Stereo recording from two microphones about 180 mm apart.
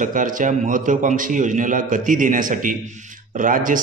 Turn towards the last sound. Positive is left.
turn(degrees=-50)  # may be behind; listen again after turning